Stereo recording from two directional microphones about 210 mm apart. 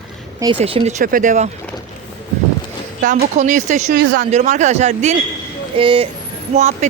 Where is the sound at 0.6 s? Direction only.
30° right (ahead or behind).